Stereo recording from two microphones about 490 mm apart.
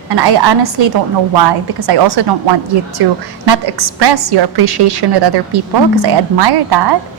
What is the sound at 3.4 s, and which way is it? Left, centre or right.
A woman's voice, right.